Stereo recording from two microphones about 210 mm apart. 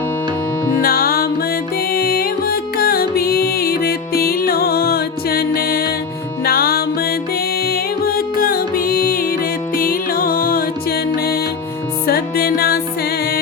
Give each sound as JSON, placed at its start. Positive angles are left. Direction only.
{"t": 0.8, "sound": "music", "side_deg": 45}